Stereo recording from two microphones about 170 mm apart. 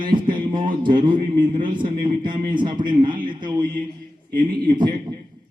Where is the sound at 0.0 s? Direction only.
30° right (ahead or behind).